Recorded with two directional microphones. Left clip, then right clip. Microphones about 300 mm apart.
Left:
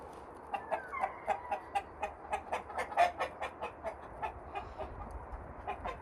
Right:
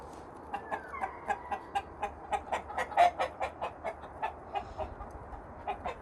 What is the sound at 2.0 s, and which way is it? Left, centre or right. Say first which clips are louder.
Chicken: right 3 dB; centre.